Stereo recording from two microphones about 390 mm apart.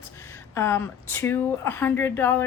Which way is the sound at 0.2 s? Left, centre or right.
Centre.